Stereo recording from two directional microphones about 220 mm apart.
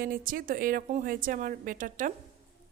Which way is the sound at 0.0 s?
40° right (ahead or behind).